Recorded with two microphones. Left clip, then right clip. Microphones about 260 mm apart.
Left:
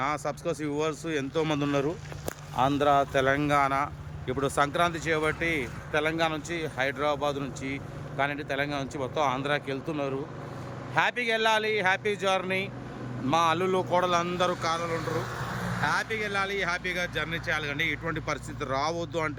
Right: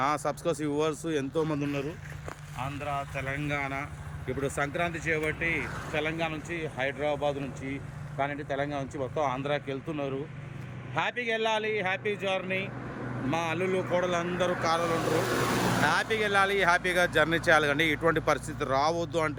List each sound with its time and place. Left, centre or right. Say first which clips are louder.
0.0 s speech: right 1 dB; centre
1.5 s speech: left 4 dB; centre
3.2 s speech: left 9 dB; centre
11.2 s speech: left 3 dB; centre
14.6 s speech: right 2 dB; centre
14.8 s speech: right 4 dB; right
15.9 s speech: right 2 dB; centre